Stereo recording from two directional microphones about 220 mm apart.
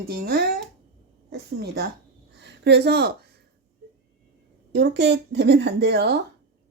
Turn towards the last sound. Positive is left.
turn(degrees=-50)  # may be behind; listen again after turning